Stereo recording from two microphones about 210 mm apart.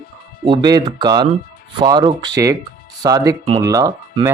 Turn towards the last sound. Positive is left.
turn(degrees=-15)  # may be behind; listen again after turning